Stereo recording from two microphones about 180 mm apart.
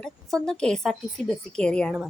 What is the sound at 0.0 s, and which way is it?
Speech, 5° left (ahead or behind).